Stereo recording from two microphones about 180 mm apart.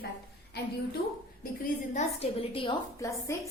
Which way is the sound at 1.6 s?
45° left (ahead or behind).